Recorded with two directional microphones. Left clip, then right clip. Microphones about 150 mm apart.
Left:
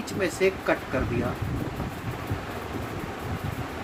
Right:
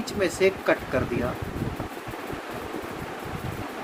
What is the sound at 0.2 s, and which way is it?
Speech, 40° right (ahead or behind).